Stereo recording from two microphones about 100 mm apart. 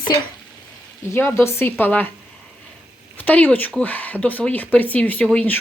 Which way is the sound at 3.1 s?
15° left (ahead or behind).